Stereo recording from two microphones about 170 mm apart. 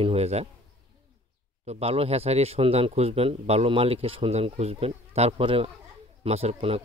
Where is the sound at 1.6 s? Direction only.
40° right (ahead or behind).